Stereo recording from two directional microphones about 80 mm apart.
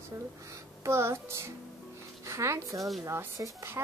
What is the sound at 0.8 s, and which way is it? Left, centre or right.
Speech, right.